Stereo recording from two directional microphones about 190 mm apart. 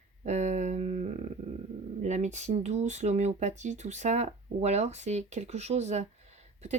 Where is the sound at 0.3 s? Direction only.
35° right (ahead or behind).